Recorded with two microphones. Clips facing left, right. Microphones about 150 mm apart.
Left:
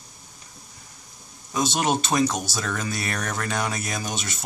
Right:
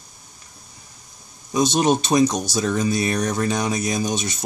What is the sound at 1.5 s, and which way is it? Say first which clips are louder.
Speech: right 5 dB; 15° right (ahead or behind).